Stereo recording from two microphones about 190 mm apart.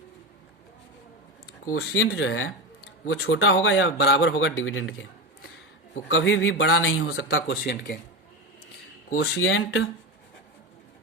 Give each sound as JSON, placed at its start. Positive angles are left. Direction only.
{"t": 1.7, "sound": "speech", "side_deg": 90}
{"t": 6.1, "sound": "speech", "side_deg": 85}
{"t": 7.6, "sound": "speech", "side_deg": 50}
{"t": 9.2, "sound": "speech", "side_deg": 90}